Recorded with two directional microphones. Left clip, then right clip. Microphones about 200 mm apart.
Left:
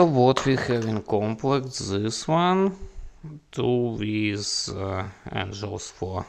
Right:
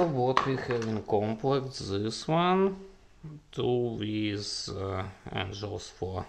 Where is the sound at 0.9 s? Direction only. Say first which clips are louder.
Left 3 dB; 40° left (ahead or behind).